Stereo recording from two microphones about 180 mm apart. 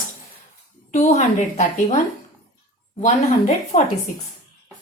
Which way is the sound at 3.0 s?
45° left (ahead or behind).